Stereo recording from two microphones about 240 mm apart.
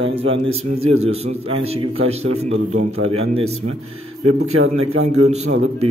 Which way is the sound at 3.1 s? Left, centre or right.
Right.